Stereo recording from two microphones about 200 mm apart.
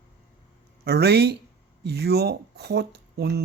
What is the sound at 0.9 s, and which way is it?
Speech, 55° right (ahead or behind).